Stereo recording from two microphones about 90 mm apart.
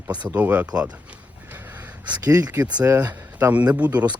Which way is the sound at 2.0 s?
45° right (ahead or behind).